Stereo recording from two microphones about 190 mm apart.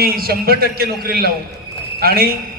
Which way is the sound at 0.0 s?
50° right (ahead or behind).